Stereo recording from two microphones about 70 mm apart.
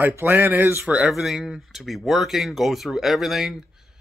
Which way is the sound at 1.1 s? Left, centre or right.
Centre.